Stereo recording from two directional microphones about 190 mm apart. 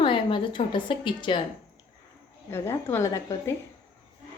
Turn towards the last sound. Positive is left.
turn(degrees=15)  # may be behind; listen again after turning